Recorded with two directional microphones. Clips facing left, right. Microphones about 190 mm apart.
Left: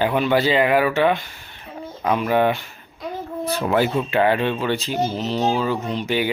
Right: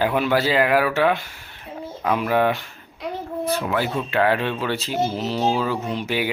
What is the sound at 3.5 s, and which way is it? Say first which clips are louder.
Speech: left 6 dB; 35° left (ahead or behind).